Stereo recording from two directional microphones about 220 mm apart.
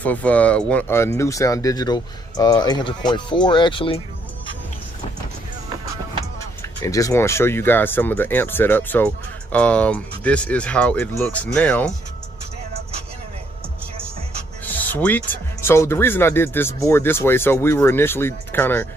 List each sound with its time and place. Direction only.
0.0 s speech: 5° left (ahead or behind); by 4.0 s 25° left (ahead or behind)
6.6 s speech: 10° left (ahead or behind)
14.6 s speech: 10° left (ahead or behind)